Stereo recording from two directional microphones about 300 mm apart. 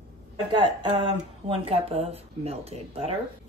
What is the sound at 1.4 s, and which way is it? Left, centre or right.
Speech, centre.